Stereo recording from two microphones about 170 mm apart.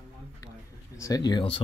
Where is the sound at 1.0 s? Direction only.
20° left (ahead or behind).